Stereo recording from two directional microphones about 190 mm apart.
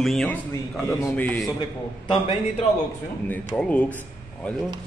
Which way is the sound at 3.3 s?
10° left (ahead or behind).